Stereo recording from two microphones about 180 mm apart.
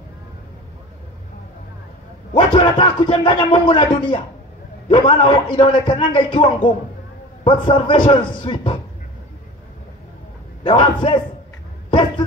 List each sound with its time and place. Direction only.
2.3 s music: 25° left (ahead or behind)
10.6 s a man's voice: 30° left (ahead or behind)